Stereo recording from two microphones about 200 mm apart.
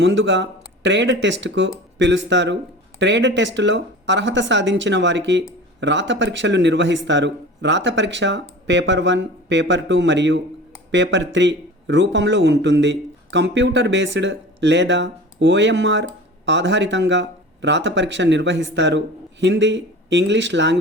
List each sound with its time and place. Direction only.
0.0 s speech: 65° right (ahead or behind)